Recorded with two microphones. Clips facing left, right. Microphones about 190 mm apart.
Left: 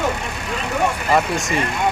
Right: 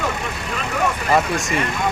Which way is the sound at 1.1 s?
Centre (ahead or behind).